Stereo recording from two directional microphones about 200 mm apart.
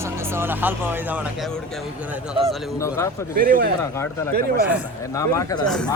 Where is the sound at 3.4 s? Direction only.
45° right (ahead or behind).